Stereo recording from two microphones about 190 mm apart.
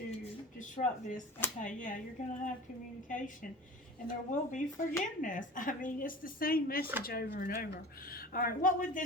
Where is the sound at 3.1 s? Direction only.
45° left (ahead or behind).